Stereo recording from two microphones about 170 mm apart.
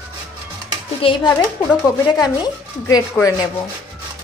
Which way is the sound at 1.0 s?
35° left (ahead or behind).